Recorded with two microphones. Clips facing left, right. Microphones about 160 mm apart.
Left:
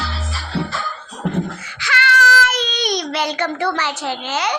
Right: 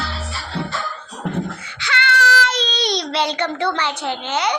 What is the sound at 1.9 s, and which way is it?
Child singing, 25° right (ahead or behind).